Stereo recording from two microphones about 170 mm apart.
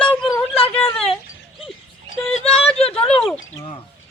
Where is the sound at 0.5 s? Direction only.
35° left (ahead or behind).